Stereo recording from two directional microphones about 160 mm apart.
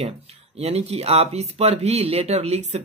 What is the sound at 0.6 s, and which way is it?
A man's voice, 40° right (ahead or behind).